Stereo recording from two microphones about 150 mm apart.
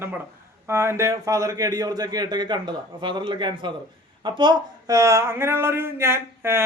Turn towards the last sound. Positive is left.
turn(degrees=-15)  # may be behind; listen again after turning